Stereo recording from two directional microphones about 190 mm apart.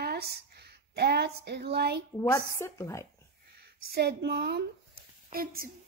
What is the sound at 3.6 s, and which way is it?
A woman's voice, 60° right (ahead or behind).